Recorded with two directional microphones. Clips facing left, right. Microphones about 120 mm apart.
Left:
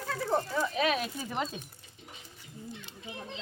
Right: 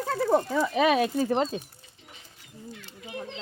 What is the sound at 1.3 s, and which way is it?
Speech, 30° right (ahead or behind).